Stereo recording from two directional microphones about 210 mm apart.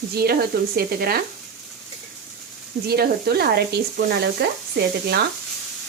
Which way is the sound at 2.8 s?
45° right (ahead or behind).